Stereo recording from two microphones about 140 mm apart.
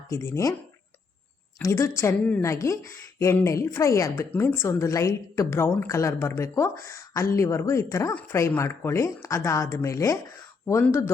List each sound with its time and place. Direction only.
0.1 s a woman's voice: 20° left (ahead or behind)
1.6 s a woman's voice: 20° left (ahead or behind)